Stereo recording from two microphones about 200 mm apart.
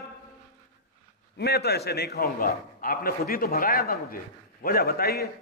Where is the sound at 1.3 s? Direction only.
55° left (ahead or behind).